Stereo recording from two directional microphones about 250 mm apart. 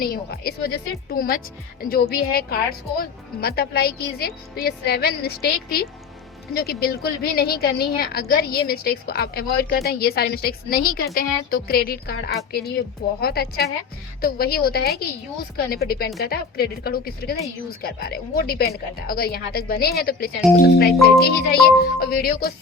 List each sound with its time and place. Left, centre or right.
0.0 s a woman's voice: left